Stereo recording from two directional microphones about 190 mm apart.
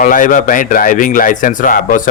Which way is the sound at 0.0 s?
45° left (ahead or behind).